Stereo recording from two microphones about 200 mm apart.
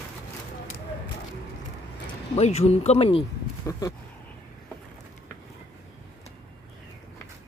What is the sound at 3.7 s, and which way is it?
Speech, 15° left (ahead or behind).